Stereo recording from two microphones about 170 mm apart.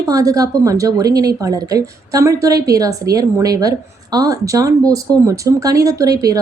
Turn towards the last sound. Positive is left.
turn(degrees=-20)  # may be behind; listen again after turning